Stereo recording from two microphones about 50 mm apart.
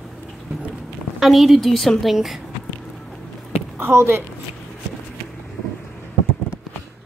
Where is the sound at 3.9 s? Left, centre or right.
Right.